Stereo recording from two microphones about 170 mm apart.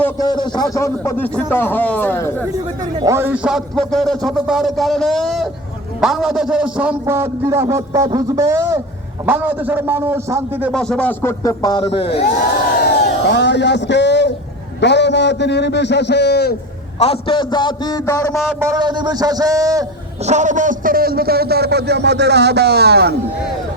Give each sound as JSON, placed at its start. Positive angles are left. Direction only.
{"t": 0.2, "sound": "a man's voice", "side_deg": 25}
{"t": 3.0, "sound": "a man's voice", "side_deg": -15}
{"t": 10.7, "sound": "a man's voice", "side_deg": 5}
{"t": 11.2, "sound": "a man's voice", "side_deg": 15}
{"t": 11.9, "sound": "speech", "side_deg": 35}
{"t": 12.8, "sound": "a man's voice", "side_deg": 85}
{"t": 17.0, "sound": "a man's voice", "side_deg": 35}
{"t": 18.6, "sound": "a man's voice", "side_deg": -20}
{"t": 20.2, "sound": "a man's voice", "side_deg": -45}